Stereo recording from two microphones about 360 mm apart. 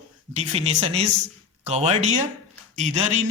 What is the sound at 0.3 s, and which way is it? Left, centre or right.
A man's voice, centre.